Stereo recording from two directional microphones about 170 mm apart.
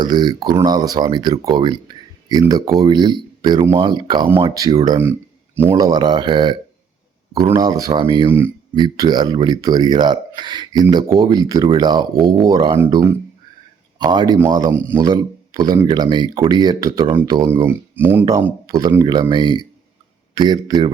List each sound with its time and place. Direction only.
0.0 s speech: 25° right (ahead or behind)
4.9 s speech: 15° right (ahead or behind)
15.0 s speech: 25° right (ahead or behind)